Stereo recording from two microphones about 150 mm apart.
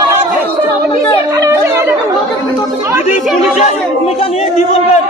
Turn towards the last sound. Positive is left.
turn(degrees=40)  # may be behind; listen again after turning